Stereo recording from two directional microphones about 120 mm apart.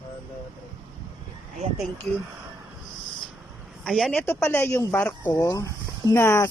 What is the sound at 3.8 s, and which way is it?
Speech, centre (ahead or behind).